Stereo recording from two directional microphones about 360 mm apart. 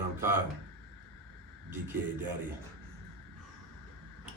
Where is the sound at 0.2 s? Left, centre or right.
Centre.